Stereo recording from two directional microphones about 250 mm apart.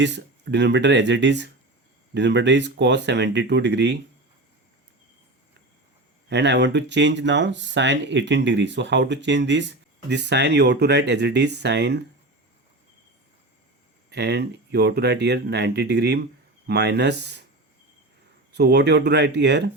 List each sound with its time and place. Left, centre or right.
0.0 s speech: right
6.2 s speech: right
14.1 s speech: right
18.5 s speech: right